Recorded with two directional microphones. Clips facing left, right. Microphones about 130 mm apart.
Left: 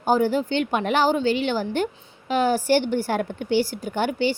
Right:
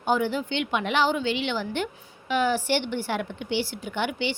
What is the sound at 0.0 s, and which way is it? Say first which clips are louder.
A woman's voice: left 4 dB; 40° left (ahead or behind).